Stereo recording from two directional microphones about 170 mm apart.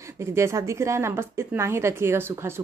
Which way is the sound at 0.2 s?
15° right (ahead or behind).